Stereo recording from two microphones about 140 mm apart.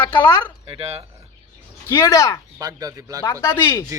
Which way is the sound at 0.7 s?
45° right (ahead or behind).